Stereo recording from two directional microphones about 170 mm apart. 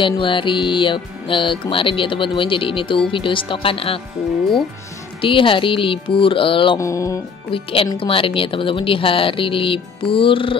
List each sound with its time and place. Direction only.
0.0 s speech: 30° left (ahead or behind)
5.2 s speech: 30° left (ahead or behind)
6.8 s speech: 20° left (ahead or behind)
7.5 s speech: 30° left (ahead or behind)